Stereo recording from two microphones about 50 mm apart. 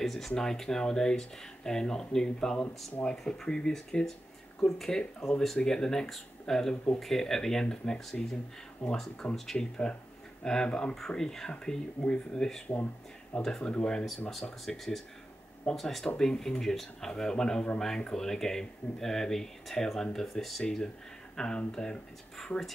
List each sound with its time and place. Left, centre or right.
0.0 s speech: centre; by 11.0 s left
11.0 s speech: centre
20.6 s speech: centre